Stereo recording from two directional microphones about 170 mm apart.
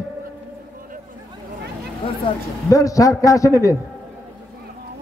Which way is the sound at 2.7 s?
20° left (ahead or behind).